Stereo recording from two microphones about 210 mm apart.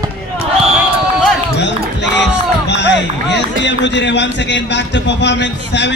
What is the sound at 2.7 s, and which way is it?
Speech, 55° left (ahead or behind).